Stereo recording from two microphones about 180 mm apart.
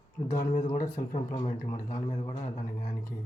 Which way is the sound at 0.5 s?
45° left (ahead or behind).